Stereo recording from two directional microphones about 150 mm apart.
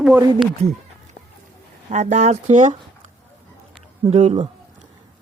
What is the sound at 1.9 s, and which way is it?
Speech, 50° right (ahead or behind).